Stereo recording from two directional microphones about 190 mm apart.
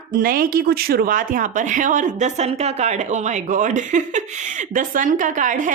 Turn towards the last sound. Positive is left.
turn(degrees=-40)  # may be behind; listen again after turning